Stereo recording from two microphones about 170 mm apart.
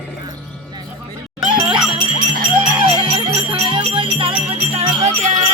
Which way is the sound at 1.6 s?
30° right (ahead or behind).